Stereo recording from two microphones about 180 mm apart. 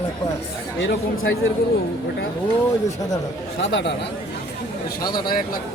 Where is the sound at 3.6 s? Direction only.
80° left.